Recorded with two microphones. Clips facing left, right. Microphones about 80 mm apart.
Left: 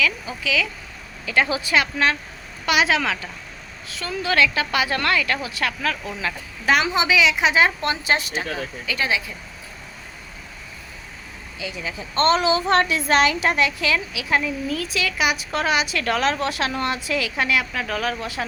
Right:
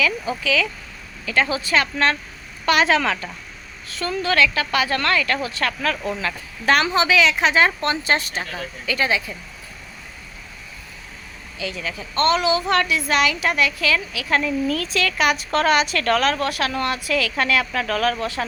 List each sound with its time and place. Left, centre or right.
0.0 s a woman's voice: centre
1.2 s a woman's voice: left; by 4.1 s centre
4.2 s a woman's voice: centre
11.6 s a woman's voice: centre